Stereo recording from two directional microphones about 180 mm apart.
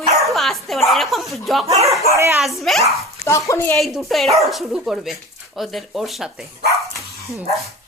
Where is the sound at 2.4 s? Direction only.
Centre (ahead or behind).